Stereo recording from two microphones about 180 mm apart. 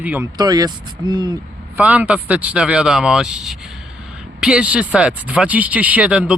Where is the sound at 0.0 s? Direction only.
10° right (ahead or behind).